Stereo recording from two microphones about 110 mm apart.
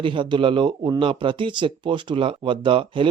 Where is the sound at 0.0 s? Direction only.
50° right (ahead or behind).